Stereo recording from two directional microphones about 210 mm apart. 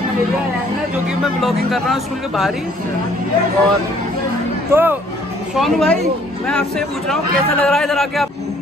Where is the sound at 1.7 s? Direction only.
Centre (ahead or behind).